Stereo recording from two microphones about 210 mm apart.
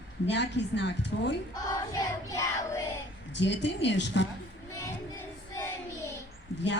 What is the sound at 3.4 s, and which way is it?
Speech, 55° left (ahead or behind).